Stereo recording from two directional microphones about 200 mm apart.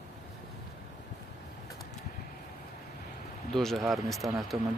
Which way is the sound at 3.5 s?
Centre (ahead or behind).